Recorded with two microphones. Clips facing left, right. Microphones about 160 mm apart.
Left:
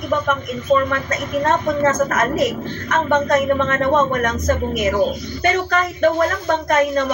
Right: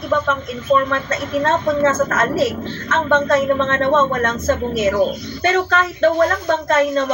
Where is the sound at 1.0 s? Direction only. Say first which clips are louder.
Even; 15° left (ahead or behind).